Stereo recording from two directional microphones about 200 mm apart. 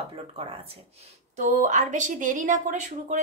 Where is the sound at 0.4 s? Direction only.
30° right (ahead or behind).